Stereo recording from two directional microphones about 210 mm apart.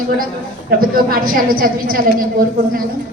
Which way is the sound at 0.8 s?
45° right (ahead or behind).